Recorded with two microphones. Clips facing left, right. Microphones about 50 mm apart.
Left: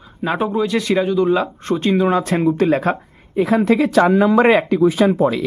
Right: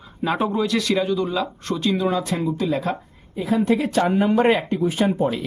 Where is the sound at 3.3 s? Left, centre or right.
Left.